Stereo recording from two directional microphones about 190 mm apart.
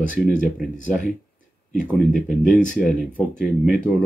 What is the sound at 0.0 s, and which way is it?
Speech, 45° left (ahead or behind).